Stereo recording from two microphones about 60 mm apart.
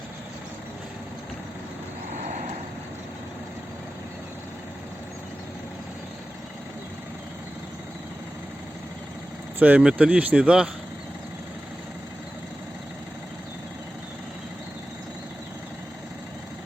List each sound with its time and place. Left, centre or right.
9.6 s speech: right